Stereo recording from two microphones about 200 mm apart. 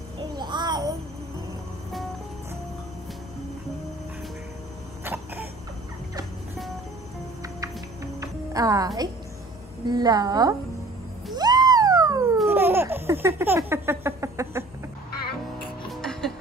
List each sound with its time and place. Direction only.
0.4 s babbling: 20° right (ahead or behind)
5.0 s cough: 10° right (ahead or behind)
7.4 s music: 15° right (ahead or behind)
9.8 s a woman's voice: 20° right (ahead or behind)
11.3 s a sound: 20° right (ahead or behind)
12.4 s laughter: 10° right (ahead or behind)
15.9 s music: centre (ahead or behind)